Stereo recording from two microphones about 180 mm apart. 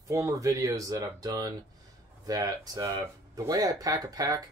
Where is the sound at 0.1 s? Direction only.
15° right (ahead or behind).